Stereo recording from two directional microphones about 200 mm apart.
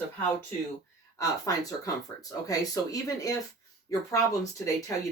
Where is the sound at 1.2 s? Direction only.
15° left (ahead or behind).